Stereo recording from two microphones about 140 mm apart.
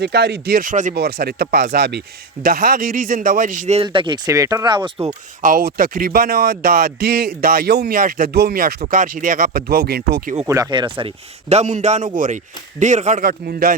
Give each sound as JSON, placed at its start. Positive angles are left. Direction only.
{"t": 0.5, "sound": "speech", "side_deg": -75}
{"t": 3.8, "sound": "speech", "side_deg": -35}
{"t": 4.3, "sound": "speech", "side_deg": -25}
{"t": 5.4, "sound": "speech", "side_deg": -80}
{"t": 8.9, "sound": "speech", "side_deg": -70}
{"t": 10.4, "sound": "speech", "side_deg": -25}
{"t": 11.4, "sound": "a man's voice", "side_deg": -55}